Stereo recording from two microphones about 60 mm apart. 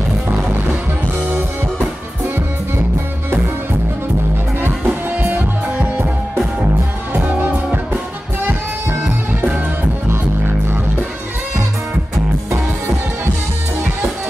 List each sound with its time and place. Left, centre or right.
4.6 s music: right
10.0 s music: right